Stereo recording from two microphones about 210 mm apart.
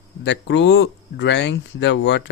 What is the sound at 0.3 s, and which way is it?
Speech, 55° left (ahead or behind).